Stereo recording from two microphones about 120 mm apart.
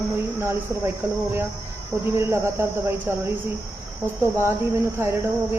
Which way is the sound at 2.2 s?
20° right (ahead or behind).